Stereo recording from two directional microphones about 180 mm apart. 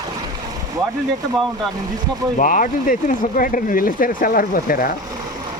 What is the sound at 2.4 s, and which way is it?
Speech, 45° left (ahead or behind).